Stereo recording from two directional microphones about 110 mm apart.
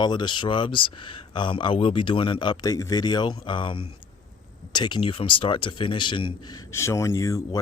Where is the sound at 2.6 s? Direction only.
30° left (ahead or behind).